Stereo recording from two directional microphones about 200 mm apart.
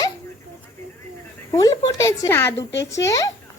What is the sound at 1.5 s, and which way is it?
A child's voice, 15° left (ahead or behind).